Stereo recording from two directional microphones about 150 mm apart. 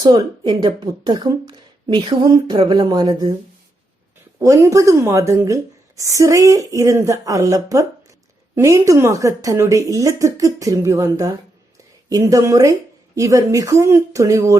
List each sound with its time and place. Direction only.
0.0 s speech: 30° right (ahead or behind)
4.4 s speech: 20° right (ahead or behind)